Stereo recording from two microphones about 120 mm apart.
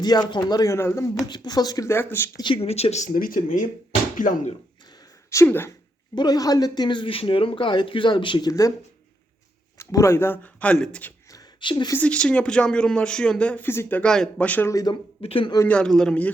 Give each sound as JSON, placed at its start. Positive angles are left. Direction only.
{"t": 0.0, "sound": "speech", "side_deg": 35}
{"t": 1.3, "sound": "speech", "side_deg": 35}
{"t": 1.9, "sound": "speech", "side_deg": 20}
{"t": 2.4, "sound": "speech", "side_deg": 50}
{"t": 4.9, "sound": "a sound", "side_deg": 30}
{"t": 5.5, "sound": "speech", "side_deg": 20}
{"t": 6.1, "sound": "speech", "side_deg": 35}
{"t": 9.7, "sound": "speech", "side_deg": 25}
{"t": 11.6, "sound": "speech", "side_deg": 40}
{"t": 11.9, "sound": "speech", "side_deg": 10}
{"t": 14.7, "sound": "speech", "side_deg": 30}
{"t": 15.2, "sound": "a man's voice", "side_deg": 50}
{"t": 15.6, "sound": "speech", "side_deg": 10}